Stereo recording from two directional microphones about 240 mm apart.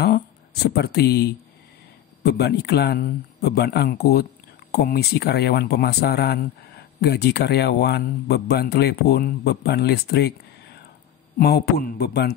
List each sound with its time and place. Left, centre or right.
0.0 s speech: left